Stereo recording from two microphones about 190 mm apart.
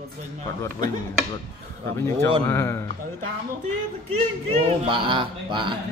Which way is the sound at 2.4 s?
15° left (ahead or behind).